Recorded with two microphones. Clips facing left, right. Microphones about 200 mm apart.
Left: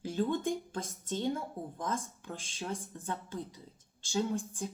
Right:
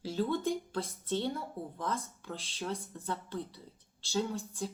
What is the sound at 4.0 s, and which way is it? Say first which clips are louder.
Speech: left 1 dB; 15° left (ahead or behind).